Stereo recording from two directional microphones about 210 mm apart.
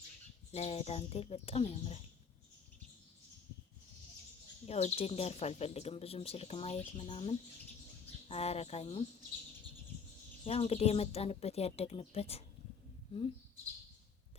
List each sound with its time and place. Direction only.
0.5 s speech: 30° left (ahead or behind)
4.6 s speech: 30° left (ahead or behind)
10.4 s speech: 30° left (ahead or behind)